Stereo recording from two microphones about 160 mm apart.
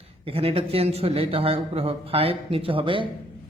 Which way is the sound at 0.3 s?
35° right (ahead or behind).